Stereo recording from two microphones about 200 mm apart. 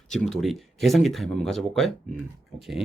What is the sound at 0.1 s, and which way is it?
Speech, centre (ahead or behind).